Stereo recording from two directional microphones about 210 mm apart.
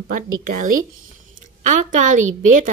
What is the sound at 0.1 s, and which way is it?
A woman's voice, 40° right (ahead or behind).